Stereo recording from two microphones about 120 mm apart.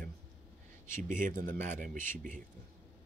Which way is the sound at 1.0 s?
90° right.